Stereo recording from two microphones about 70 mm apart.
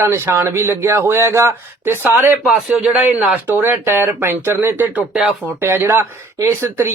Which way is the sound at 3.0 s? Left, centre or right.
Right.